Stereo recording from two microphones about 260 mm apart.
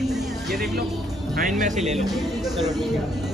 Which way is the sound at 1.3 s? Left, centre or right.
Right.